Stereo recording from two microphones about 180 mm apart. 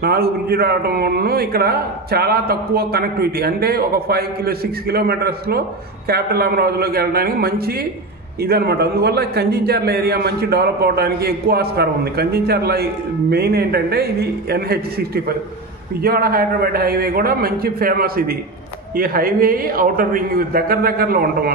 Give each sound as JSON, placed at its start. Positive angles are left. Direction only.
{"t": 0.0, "sound": "a man's voice", "side_deg": -60}